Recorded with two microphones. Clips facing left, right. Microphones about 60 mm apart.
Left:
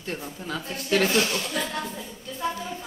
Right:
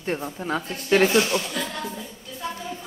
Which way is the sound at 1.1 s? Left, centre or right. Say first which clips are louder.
Right 3 dB; centre.